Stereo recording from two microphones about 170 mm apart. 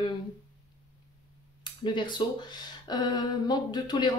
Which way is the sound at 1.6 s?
25° left (ahead or behind).